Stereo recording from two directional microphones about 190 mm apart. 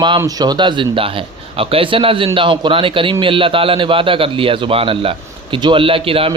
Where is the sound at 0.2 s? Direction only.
20° right (ahead or behind).